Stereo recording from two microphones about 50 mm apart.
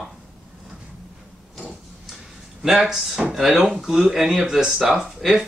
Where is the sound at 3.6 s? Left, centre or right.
Centre.